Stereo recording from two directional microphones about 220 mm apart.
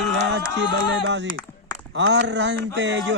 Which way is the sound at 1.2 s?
15° left (ahead or behind).